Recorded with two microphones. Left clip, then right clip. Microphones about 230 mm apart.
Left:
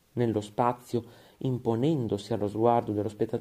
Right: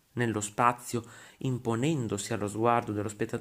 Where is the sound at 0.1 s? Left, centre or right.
Centre.